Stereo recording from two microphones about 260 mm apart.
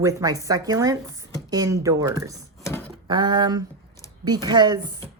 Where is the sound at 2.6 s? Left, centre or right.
Centre.